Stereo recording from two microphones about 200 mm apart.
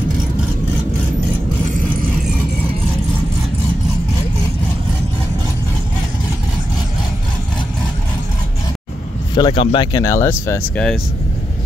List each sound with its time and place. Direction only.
9.3 s speech: 25° left (ahead or behind)